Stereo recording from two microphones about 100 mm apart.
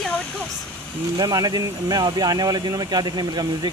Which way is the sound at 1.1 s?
40° right (ahead or behind).